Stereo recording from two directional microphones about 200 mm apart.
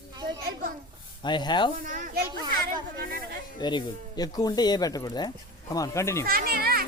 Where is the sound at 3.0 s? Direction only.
45° right (ahead or behind).